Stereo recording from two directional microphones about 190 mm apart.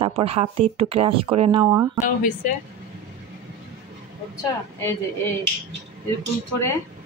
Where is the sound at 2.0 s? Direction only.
45° left (ahead or behind).